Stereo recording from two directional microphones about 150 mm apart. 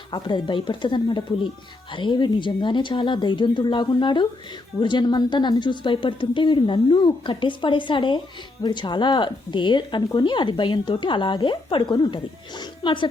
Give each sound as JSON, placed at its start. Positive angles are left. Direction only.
{"t": 0.1, "sound": "speech", "side_deg": 30}